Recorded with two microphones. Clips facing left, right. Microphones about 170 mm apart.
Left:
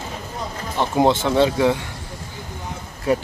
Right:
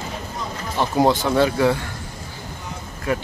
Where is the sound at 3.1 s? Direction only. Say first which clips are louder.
Left 4 dB; 35° left (ahead or behind).